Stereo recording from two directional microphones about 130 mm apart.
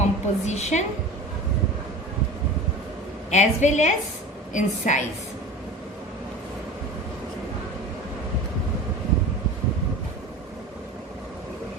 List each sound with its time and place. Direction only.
0.0 s a woman's voice: 60° left (ahead or behind)
3.2 s a woman's voice: 65° left (ahead or behind)